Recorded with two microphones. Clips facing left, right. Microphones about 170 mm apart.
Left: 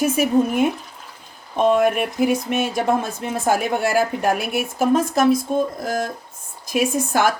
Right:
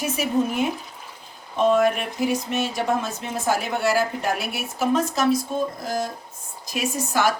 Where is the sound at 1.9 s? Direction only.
55° left (ahead or behind).